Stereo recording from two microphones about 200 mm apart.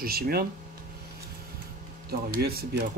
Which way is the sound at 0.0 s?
50° right (ahead or behind).